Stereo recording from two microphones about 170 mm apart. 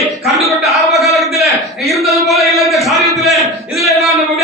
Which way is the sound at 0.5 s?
Centre (ahead or behind).